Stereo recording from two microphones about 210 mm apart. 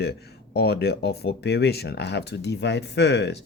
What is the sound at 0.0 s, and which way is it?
Speech, 50° left (ahead or behind).